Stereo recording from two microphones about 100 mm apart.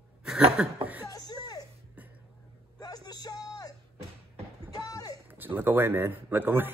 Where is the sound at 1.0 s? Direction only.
40° left (ahead or behind).